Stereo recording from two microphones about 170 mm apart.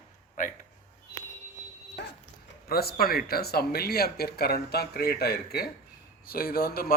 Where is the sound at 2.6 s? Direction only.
65° left (ahead or behind).